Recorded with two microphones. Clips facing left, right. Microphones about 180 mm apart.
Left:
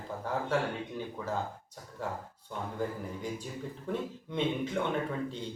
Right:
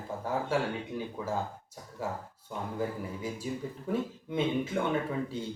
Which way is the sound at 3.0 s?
5° right (ahead or behind).